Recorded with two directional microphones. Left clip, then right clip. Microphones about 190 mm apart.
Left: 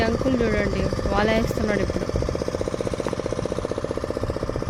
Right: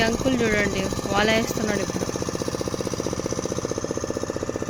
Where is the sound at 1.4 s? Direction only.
55° right (ahead or behind).